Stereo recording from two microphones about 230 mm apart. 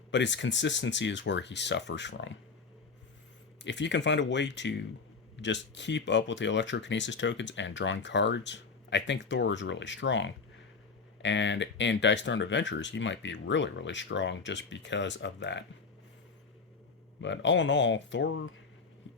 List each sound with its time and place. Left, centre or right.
0.1 s speech: left
3.6 s speech: left
17.2 s speech: left